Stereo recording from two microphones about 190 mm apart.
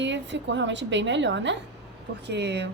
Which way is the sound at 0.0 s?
70° right (ahead or behind).